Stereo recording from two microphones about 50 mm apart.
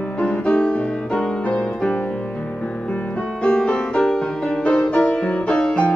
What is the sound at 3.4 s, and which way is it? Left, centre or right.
Music, centre.